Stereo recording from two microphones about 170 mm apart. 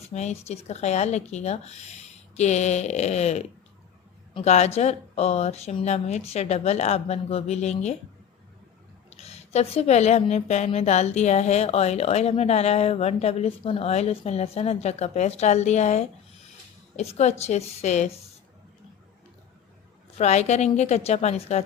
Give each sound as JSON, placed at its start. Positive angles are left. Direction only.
{"t": 0.0, "sound": "a woman's voice", "side_deg": 40}
{"t": 9.0, "sound": "a woman's voice", "side_deg": 40}
{"t": 20.1, "sound": "a woman's voice", "side_deg": 40}